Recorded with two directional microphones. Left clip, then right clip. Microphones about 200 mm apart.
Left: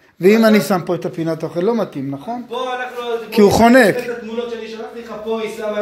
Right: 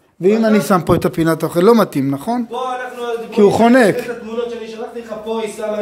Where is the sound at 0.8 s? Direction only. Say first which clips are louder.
Right 6 dB; 30° right (ahead or behind).